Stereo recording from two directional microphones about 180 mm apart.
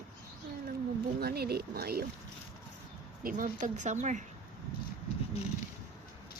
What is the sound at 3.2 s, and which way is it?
Speech, 45° right (ahead or behind).